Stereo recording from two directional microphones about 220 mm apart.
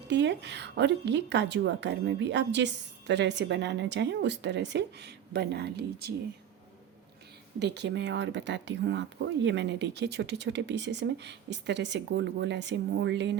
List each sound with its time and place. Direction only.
0.1 s a woman's voice: 55° right (ahead or behind)
7.6 s a woman's voice: 50° right (ahead or behind)